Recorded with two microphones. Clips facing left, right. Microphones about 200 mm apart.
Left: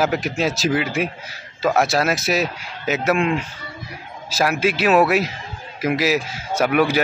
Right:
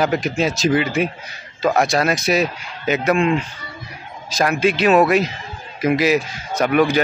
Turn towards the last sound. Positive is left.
turn(degrees=5)  # may be behind; listen again after turning